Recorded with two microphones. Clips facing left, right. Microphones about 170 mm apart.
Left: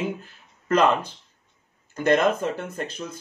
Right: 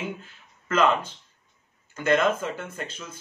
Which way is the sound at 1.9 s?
40° left (ahead or behind).